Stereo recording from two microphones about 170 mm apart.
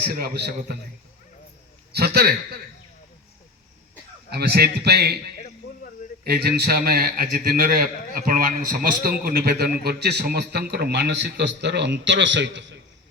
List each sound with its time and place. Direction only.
0.1 s a man's voice: 65° right (ahead or behind)
1.9 s a man's voice: 65° right (ahead or behind)
4.3 s a man's voice: 70° right (ahead or behind)
5.4 s a sound: 50° left (ahead or behind)
6.2 s a man's voice: 65° right (ahead or behind)
9.2 s a man's voice: 65° right (ahead or behind); by 12.7 s 90° right